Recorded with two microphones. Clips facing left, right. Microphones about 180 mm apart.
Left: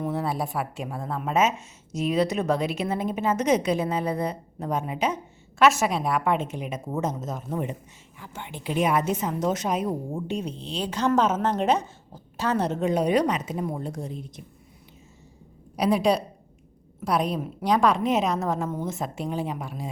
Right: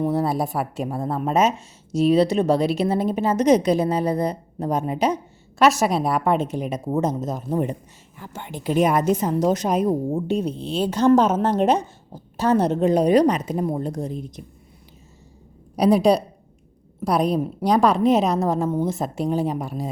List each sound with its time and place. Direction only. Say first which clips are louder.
0.0 s speech: right 6 dB; 35° right (ahead or behind)
15.7 s speech: right 5 dB; 35° right (ahead or behind)